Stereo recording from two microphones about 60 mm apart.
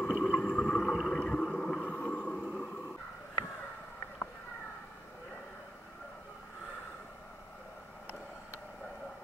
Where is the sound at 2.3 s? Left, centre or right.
Centre.